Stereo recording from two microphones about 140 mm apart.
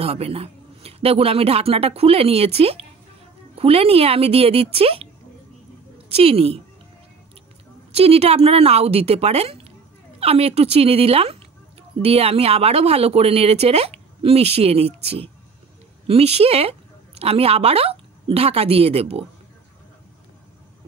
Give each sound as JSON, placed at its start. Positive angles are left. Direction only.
{"t": 0.0, "sound": "speech", "side_deg": -45}
{"t": 6.0, "sound": "a woman's voice", "side_deg": -45}
{"t": 7.9, "sound": "a woman's voice", "side_deg": -45}